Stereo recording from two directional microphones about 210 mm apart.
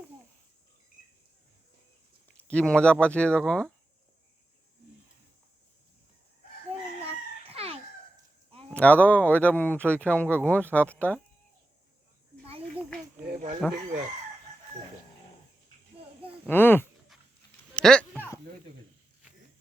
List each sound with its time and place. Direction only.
2.4 s speech: 5° left (ahead or behind)
7.0 s chicken: 30° right (ahead or behind)
8.7 s speech: 5° left (ahead or behind)
13.6 s speech: 5° left (ahead or behind)
16.5 s speech: 10° left (ahead or behind)
17.7 s a sound: 5° left (ahead or behind)